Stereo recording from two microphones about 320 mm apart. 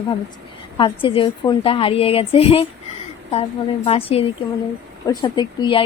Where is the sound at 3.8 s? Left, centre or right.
Centre.